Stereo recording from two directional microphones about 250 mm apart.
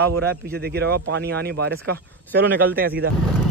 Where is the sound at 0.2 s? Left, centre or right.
Right.